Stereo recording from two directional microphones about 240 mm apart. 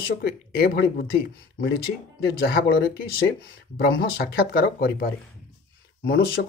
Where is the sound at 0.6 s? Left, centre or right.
Left.